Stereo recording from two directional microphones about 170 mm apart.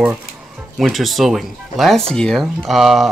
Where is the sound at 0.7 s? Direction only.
Centre (ahead or behind).